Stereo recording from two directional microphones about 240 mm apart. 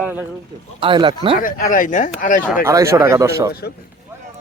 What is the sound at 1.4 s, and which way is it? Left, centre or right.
Speech, left.